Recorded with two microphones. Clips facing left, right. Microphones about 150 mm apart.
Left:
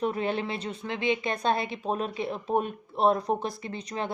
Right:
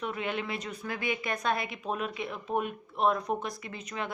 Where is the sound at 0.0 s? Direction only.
35° left (ahead or behind).